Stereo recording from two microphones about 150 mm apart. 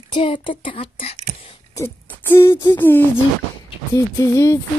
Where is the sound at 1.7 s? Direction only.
15° left (ahead or behind).